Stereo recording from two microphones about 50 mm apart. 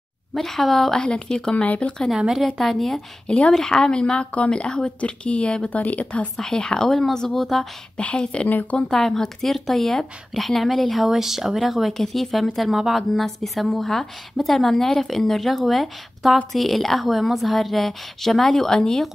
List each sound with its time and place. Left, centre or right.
0.3 s a woman's voice: centre; by 2.0 s left
2.1 s a woman's voice: centre
2.6 s speech: centre
3.3 s a woman's voice: centre
6.3 s a woman's voice: centre
8.2 s a woman's voice: left
8.5 s speech: left
8.7 s speech: centre